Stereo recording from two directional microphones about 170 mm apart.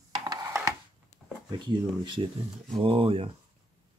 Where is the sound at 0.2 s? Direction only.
20° right (ahead or behind).